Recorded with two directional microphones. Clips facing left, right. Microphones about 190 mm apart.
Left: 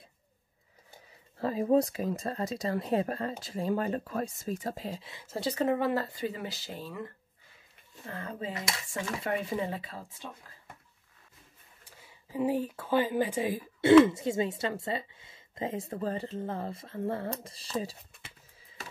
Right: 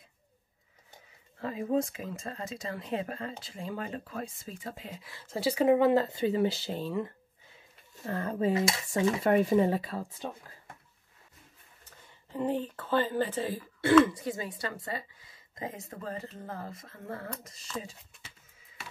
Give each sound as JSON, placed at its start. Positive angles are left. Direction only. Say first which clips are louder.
{"t": 1.4, "sound": "speech", "louder": "left 4 dB", "side_deg": 35}
{"t": 5.4, "sound": "speech", "louder": "right 5 dB", "side_deg": -10}
{"t": 8.1, "sound": "speech", "louder": "right 9 dB", "side_deg": -45}
{"t": 12.0, "sound": "a woman's voice", "louder": "left 2 dB", "side_deg": 10}